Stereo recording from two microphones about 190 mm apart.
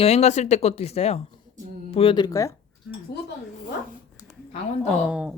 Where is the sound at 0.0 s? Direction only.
35° left (ahead or behind).